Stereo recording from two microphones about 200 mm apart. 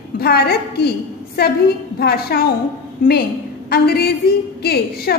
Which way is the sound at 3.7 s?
50° left (ahead or behind).